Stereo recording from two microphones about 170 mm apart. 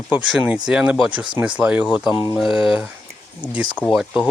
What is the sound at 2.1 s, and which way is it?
Speech, 25° left (ahead or behind).